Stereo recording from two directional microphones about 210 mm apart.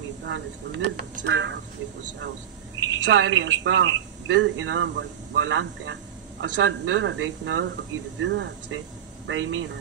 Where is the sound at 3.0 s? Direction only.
60° right (ahead or behind).